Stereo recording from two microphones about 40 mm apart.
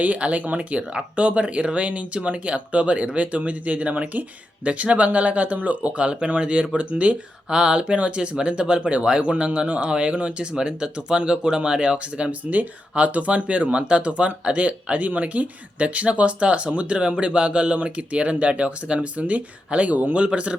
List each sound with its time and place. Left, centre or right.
0.0 s speech: right
12.3 s speech: right
20.1 s speech: right